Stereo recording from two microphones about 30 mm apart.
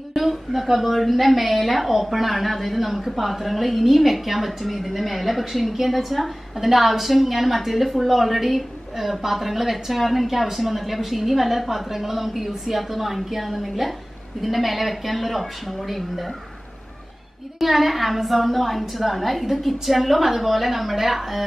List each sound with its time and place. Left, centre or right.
0.1 s a woman's voice: centre
17.6 s a woman's voice: centre